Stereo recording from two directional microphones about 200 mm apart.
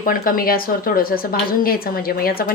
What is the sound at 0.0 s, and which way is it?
A woman's voice, 45° left (ahead or behind).